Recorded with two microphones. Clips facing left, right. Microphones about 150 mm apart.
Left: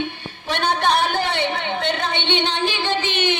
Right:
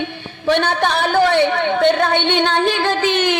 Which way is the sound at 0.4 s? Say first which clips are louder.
Right 4 dB; 75° right (ahead or behind).